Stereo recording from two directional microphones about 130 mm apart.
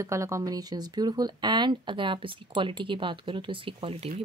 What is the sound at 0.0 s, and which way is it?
Speech, 20° right (ahead or behind).